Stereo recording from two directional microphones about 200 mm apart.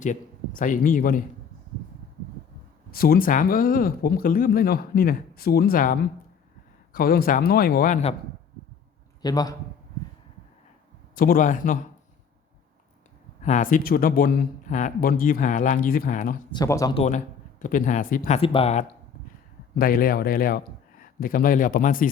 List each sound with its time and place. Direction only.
0.0 s speech: 40° left (ahead or behind)
2.9 s speech: 50° left (ahead or behind)
9.2 s a man's voice: 20° left (ahead or behind)
11.1 s speech: 45° left (ahead or behind)
13.4 s speech: 40° left (ahead or behind)
16.5 s speech: 20° left (ahead or behind)
16.9 s speech: 35° left (ahead or behind)
19.8 s speech: 45° left (ahead or behind)